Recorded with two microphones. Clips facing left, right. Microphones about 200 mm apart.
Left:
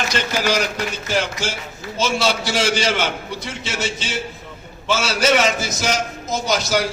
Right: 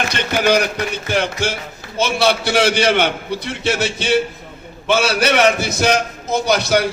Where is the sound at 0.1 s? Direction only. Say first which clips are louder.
Right 6 dB; 60° right (ahead or behind).